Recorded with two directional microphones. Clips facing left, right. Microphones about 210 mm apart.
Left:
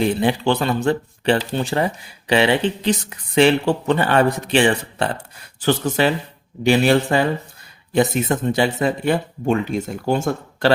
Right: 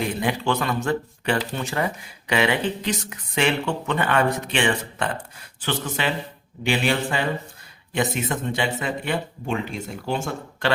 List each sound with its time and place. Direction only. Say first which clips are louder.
0.0 s speech: left 6 dB; 30° left (ahead or behind)